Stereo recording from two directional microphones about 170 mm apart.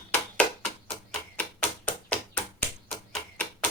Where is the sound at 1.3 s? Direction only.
10° left (ahead or behind).